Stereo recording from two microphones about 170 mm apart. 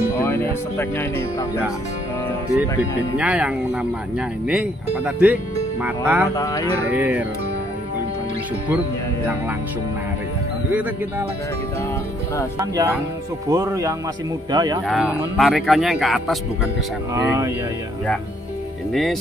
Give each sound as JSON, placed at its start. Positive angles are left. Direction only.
{"t": 0.2, "sound": "speech", "side_deg": 15}
{"t": 2.8, "sound": "speech", "side_deg": -5}
{"t": 6.3, "sound": "speech", "side_deg": 20}
{"t": 6.9, "sound": "speech", "side_deg": -10}
{"t": 10.7, "sound": "speech", "side_deg": -10}
{"t": 12.5, "sound": "speech", "side_deg": -20}
{"t": 14.9, "sound": "speech", "side_deg": 0}
{"t": 17.1, "sound": "speech", "side_deg": -20}
{"t": 18.9, "sound": "speech", "side_deg": 0}